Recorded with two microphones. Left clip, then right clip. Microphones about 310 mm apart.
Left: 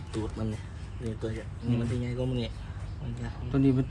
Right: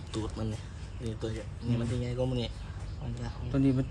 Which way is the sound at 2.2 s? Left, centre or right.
Right.